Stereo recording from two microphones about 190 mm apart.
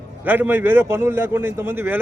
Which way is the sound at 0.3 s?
10° right (ahead or behind).